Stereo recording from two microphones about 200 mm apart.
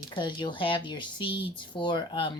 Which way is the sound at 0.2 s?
25° left (ahead or behind).